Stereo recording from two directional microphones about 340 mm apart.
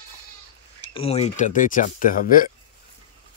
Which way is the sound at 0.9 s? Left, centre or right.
Centre.